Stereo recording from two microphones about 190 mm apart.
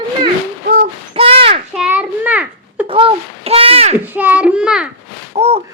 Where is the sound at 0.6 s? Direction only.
50° right (ahead or behind).